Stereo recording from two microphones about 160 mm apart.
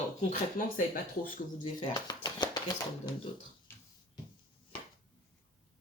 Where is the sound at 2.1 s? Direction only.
25° left (ahead or behind).